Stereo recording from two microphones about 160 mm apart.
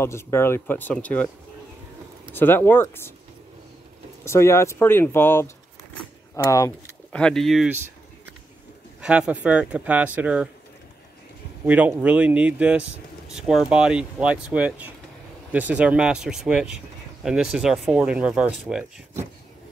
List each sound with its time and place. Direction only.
0.0 s speech: 15° left (ahead or behind)
2.3 s speech: 15° left (ahead or behind)
4.2 s speech: 15° left (ahead or behind)
7.1 s speech: 5° left (ahead or behind)
9.0 s speech: 5° right (ahead or behind)
11.6 s speech: 10° right (ahead or behind)